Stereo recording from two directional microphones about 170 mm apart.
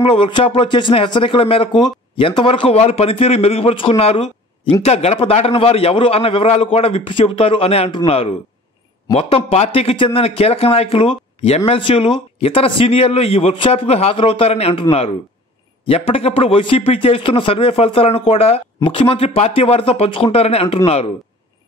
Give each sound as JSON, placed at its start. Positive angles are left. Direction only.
{"t": 0.0, "sound": "speech", "side_deg": 30}